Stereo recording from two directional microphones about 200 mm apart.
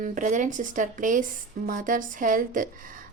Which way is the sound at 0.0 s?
40° right (ahead or behind).